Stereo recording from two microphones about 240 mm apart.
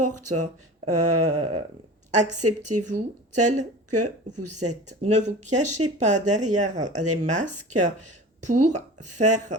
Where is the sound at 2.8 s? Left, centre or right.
Right.